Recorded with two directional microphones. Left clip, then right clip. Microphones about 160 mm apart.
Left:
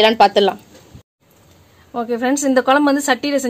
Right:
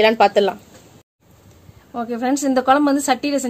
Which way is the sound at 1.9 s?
35° left (ahead or behind).